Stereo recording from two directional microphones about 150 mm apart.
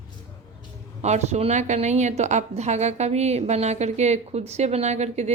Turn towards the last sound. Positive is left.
turn(degrees=-50)  # may be behind; listen again after turning